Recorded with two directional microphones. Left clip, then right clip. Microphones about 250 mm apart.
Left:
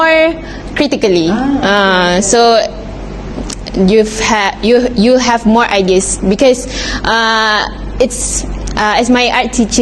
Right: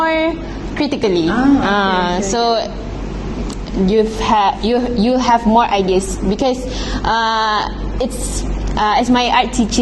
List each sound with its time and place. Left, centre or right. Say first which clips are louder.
0.0 s a sound: left 7 dB; left
0.8 s a woman's voice: left 5 dB; left
3.8 s a woman's voice: left 4 dB; left